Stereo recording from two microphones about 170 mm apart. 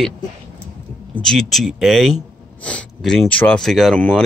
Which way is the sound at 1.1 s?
Centre (ahead or behind).